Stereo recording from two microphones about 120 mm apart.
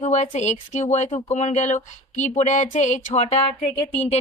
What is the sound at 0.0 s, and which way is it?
Speech, 75° left (ahead or behind).